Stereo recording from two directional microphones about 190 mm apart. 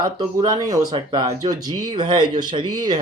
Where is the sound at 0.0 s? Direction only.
20° right (ahead or behind).